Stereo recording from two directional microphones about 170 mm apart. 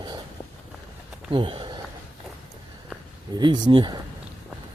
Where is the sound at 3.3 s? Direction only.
25° right (ahead or behind).